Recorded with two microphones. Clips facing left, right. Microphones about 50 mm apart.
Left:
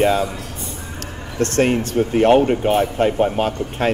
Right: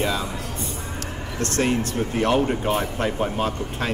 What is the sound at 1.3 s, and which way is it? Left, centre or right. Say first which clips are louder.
Speech: left 6 dB; left.